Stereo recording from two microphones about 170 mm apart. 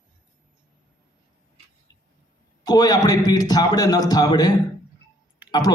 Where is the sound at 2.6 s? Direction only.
25° left (ahead or behind).